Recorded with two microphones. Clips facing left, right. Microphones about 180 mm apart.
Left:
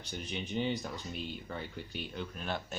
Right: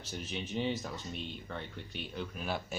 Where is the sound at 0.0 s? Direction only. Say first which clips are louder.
Even; centre (ahead or behind).